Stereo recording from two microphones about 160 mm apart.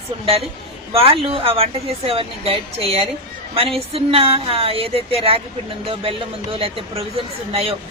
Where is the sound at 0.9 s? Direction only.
35° right (ahead or behind).